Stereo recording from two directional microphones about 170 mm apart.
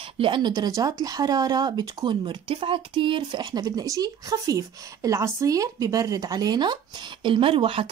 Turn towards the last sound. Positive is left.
turn(degrees=-30)  # may be behind; listen again after turning